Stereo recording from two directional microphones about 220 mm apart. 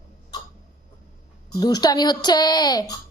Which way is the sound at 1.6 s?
15° left (ahead or behind).